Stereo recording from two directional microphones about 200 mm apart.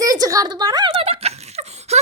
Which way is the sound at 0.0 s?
20° right (ahead or behind).